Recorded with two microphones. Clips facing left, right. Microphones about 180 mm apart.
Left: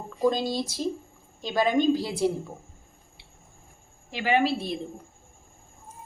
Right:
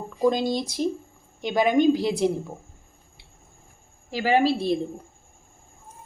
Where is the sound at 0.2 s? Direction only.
15° right (ahead or behind).